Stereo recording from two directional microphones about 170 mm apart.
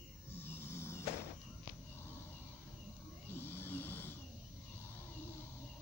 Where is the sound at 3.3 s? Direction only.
10° left (ahead or behind).